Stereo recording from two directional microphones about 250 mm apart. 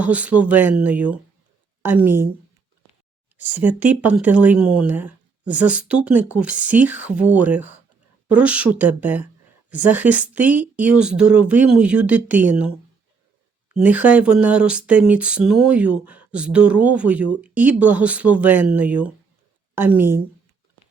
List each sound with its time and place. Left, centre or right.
0.0 s a woman's voice: centre
3.3 s speech: centre
13.7 s a woman's voice: centre